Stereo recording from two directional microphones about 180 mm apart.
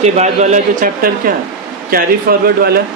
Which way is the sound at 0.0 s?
40° right (ahead or behind).